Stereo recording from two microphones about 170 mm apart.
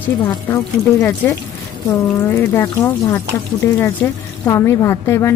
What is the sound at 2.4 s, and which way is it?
Speech, 15° left (ahead or behind).